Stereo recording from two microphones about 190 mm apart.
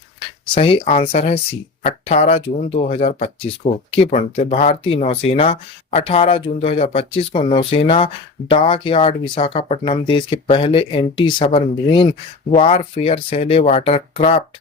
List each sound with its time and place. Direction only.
0.2 s speech: 25° left (ahead or behind)
12.5 s speech: 30° left (ahead or behind)